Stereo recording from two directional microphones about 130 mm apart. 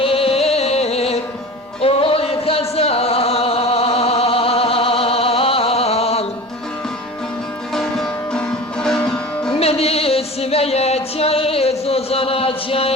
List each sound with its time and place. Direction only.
0.0 s music: 45° left (ahead or behind)
1.8 s a sound: 45° left (ahead or behind)
7.7 s music: 5° left (ahead or behind)
9.5 s music: 50° left (ahead or behind)